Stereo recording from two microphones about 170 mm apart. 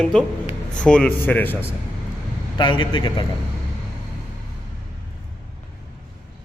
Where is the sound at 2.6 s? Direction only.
30° left (ahead or behind).